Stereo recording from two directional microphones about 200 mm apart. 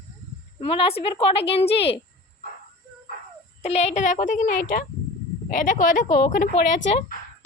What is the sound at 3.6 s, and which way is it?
Speech, 35° left (ahead or behind).